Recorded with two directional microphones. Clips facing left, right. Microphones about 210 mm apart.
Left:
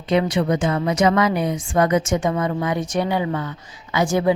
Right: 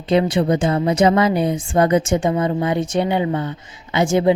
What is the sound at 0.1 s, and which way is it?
Speech, 30° right (ahead or behind).